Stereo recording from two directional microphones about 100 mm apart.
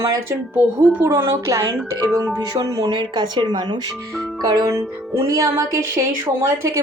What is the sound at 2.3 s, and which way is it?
A woman's voice, 40° right (ahead or behind).